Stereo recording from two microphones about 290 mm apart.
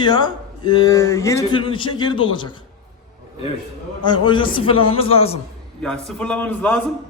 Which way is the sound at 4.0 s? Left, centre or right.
Centre.